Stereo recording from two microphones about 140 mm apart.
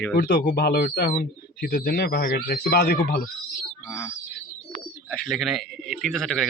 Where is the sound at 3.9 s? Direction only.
20° left (ahead or behind).